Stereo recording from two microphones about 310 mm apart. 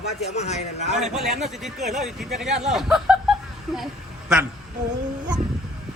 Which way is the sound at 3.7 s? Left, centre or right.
Centre.